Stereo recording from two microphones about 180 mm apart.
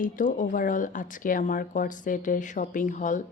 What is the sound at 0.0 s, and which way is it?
Speech, 45° left (ahead or behind).